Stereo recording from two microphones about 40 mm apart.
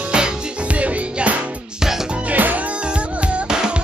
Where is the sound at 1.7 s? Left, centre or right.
Centre.